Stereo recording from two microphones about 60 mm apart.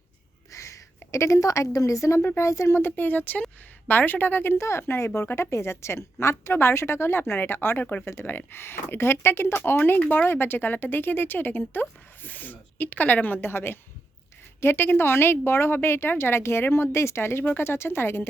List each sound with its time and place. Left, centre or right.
0.5 s a woman's voice: left
2.8 s speech: left
4.5 s a woman's voice: left
8.0 s a woman's voice: left